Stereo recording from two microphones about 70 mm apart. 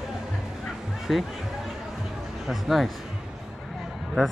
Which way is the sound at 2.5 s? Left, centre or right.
Centre.